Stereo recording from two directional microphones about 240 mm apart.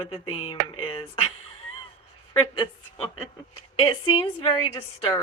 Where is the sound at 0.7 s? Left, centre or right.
Left.